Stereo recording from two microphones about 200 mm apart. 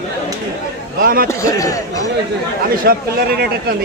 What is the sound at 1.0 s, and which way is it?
Speech, 45° right (ahead or behind).